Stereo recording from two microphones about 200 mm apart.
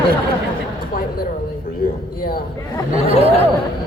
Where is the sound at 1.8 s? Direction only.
50° left (ahead or behind).